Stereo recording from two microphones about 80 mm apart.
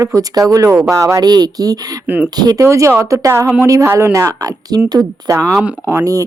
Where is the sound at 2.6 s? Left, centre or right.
Right.